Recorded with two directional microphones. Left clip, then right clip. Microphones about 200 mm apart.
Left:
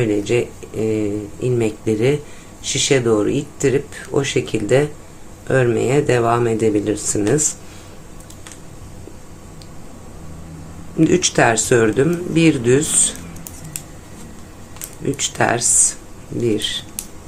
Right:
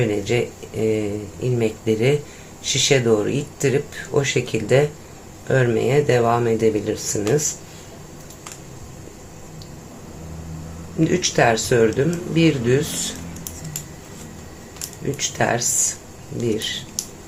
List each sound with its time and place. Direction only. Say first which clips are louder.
0.0 s speech: left 3 dB; 10° left (ahead or behind)
11.0 s speech: left 3 dB; 20° left (ahead or behind)
15.1 s speech: left 3 dB; 20° left (ahead or behind)